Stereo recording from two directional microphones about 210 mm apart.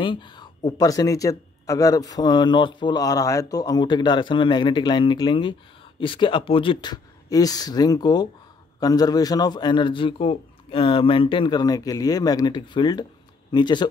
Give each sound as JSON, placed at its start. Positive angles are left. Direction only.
{"t": 0.0, "sound": "a man's voice", "side_deg": 20}